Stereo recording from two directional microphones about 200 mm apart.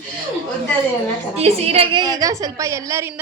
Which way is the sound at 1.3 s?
30° right (ahead or behind).